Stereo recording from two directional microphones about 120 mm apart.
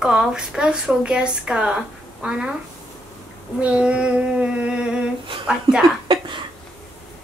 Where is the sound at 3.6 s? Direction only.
10° right (ahead or behind).